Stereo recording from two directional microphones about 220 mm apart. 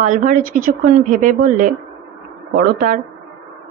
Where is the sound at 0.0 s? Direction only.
35° right (ahead or behind).